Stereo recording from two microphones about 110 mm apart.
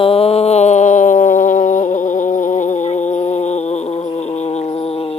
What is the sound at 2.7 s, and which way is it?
Music, 90° left.